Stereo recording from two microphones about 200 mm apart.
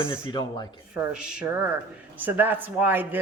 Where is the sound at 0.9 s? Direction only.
5° right (ahead or behind).